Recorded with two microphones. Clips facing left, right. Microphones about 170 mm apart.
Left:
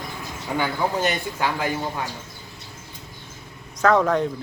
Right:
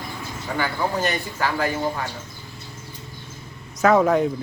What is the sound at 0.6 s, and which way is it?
A man's voice, 15° left (ahead or behind).